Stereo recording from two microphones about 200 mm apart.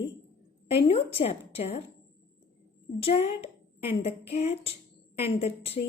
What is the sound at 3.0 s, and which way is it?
A woman's voice, 30° left (ahead or behind).